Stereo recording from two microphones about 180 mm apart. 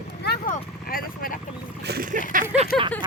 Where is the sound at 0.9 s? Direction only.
55° left (ahead or behind).